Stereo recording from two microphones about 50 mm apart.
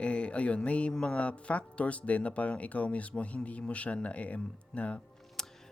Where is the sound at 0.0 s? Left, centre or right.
Left.